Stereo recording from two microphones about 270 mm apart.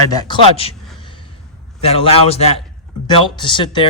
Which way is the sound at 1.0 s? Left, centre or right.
Centre.